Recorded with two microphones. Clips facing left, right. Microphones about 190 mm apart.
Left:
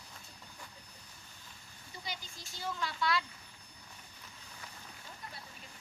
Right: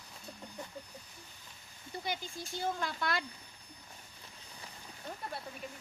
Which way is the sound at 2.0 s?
55° right (ahead or behind).